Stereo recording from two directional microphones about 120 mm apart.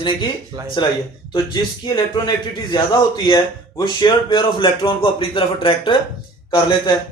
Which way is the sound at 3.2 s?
40° left (ahead or behind).